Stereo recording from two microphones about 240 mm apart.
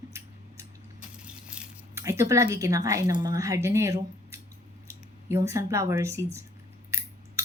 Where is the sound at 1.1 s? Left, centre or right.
Centre.